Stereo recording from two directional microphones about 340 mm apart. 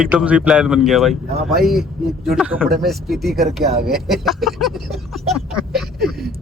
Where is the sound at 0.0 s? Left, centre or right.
Centre.